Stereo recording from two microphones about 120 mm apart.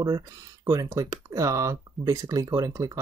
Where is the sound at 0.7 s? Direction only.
25° right (ahead or behind).